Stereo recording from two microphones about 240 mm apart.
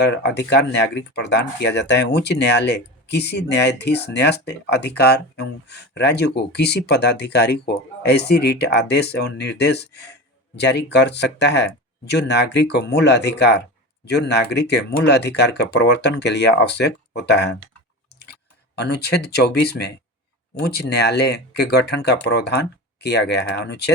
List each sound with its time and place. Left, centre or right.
0.0 s speech: left
18.8 s speech: left